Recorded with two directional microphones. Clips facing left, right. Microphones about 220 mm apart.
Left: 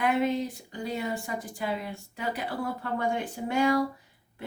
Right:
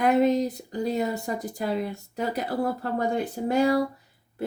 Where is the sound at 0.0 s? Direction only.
40° right (ahead or behind).